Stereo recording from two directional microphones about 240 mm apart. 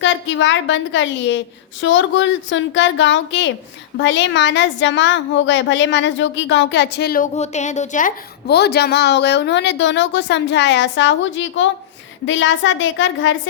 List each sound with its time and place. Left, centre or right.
0.0 s a woman's voice: left